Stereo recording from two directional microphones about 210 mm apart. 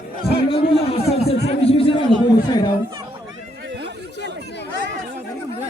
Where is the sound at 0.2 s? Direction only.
25° left (ahead or behind).